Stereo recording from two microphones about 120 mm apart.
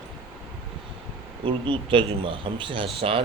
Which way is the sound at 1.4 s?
45° right (ahead or behind).